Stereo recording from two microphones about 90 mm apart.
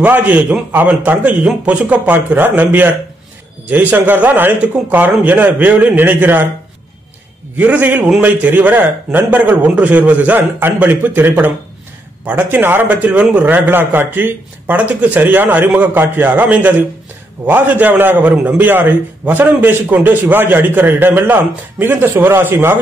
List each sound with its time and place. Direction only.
0.0 s a man's voice: 20° right (ahead or behind)
7.5 s a man's voice: 20° right (ahead or behind)